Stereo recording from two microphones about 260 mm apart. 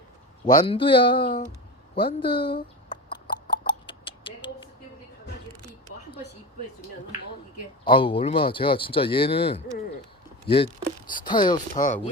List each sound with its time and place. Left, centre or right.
0.4 s speech: centre
2.9 s a sound: centre
3.5 s hiccup: centre
7.9 s speech: centre